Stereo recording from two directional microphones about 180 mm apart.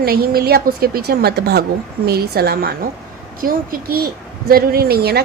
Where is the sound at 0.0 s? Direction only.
55° right (ahead or behind).